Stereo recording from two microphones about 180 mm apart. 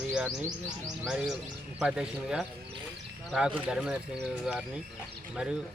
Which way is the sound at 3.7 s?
5° right (ahead or behind).